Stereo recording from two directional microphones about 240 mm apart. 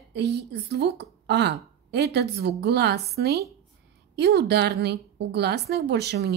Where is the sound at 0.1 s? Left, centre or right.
Right.